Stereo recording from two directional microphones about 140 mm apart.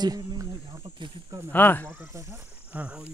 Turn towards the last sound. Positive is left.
turn(degrees=-10)  # may be behind; listen again after turning